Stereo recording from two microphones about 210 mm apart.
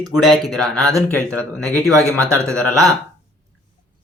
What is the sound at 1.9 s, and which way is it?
Speech, 15° right (ahead or behind).